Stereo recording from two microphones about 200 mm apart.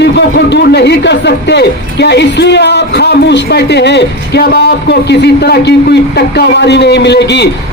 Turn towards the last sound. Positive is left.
turn(degrees=60)  # may be behind; listen again after turning